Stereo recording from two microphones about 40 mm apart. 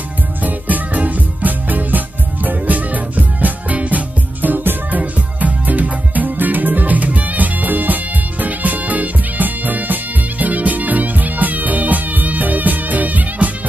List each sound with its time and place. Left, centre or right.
0.4 s music: right
4.4 s music: right
5.4 s music: right